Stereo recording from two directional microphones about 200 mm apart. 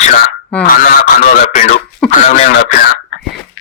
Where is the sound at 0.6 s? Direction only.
40° left (ahead or behind).